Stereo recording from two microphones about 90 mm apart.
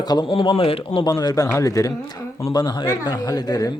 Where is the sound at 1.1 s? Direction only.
45° left (ahead or behind).